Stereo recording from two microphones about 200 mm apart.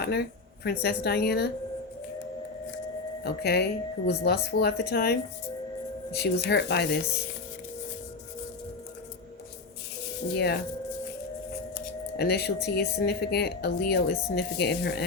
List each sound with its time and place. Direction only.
0.0 s speech: 55° left (ahead or behind)
3.2 s speech: 55° left (ahead or behind)
6.1 s speech: 55° left (ahead or behind)
10.3 s speech: 55° left (ahead or behind)
12.1 s speech: 55° left (ahead or behind)